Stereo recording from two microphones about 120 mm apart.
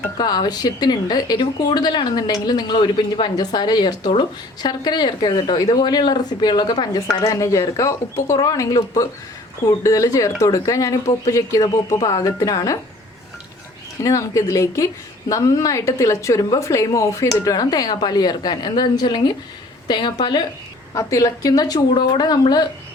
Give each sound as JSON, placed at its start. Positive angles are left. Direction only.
{"t": 0.2, "sound": "a woman's voice", "side_deg": 35}
{"t": 14.0, "sound": "a woman's voice", "side_deg": 25}
{"t": 20.9, "sound": "a woman's voice", "side_deg": 30}